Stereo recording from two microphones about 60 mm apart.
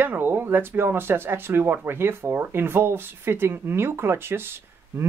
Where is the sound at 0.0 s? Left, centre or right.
Right.